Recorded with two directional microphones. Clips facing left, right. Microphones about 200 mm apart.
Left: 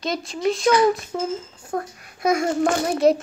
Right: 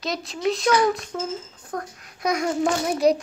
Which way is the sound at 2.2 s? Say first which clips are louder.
Left 3 dB; 50° left (ahead or behind).